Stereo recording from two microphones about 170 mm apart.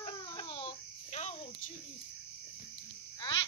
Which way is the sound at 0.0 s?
30° left (ahead or behind).